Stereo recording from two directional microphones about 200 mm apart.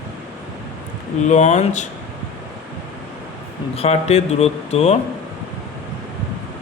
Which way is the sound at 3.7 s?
30° left (ahead or behind).